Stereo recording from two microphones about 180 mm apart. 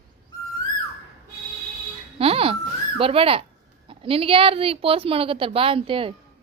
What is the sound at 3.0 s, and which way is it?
Speech, 30° right (ahead or behind).